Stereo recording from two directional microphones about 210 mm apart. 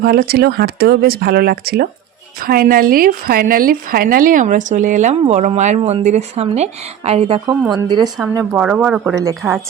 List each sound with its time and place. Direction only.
0.0 s a woman's voice: 45° right (ahead or behind); by 8.1 s 20° right (ahead or behind)
8.4 s speech: 5° right (ahead or behind)